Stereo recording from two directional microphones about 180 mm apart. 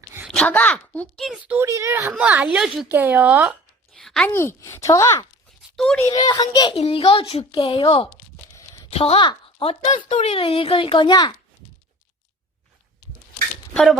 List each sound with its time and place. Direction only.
0.3 s speech: 5° left (ahead or behind)
3.9 s speech: centre (ahead or behind)
5.7 s a child's voice: 5° left (ahead or behind)
6.0 s a child's voice: 20° left (ahead or behind)
8.5 s a sound: 20° left (ahead or behind)
8.9 s a woman's voice: 35° left (ahead or behind)